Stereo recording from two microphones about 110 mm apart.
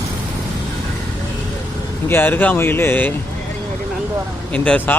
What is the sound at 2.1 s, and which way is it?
Speech, 20° left (ahead or behind).